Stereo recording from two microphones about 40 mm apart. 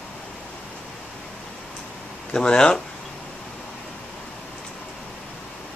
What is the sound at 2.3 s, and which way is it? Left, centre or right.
Speech, left.